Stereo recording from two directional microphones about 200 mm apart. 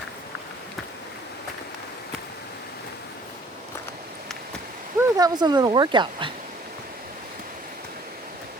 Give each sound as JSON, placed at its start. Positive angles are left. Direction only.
{"t": 4.9, "sound": "speech", "side_deg": -20}